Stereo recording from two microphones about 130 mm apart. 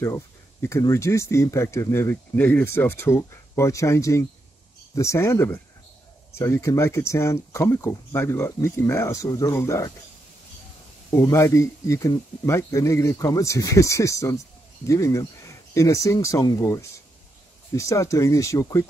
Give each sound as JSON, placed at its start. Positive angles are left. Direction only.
{"t": 0.0, "sound": "speech", "side_deg": 20}
{"t": 11.1, "sound": "speech", "side_deg": 25}